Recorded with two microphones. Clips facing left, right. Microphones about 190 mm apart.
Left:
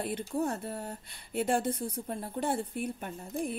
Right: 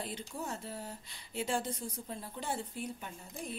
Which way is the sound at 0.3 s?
60° left (ahead or behind).